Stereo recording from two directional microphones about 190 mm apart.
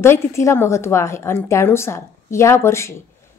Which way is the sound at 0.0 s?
15° left (ahead or behind).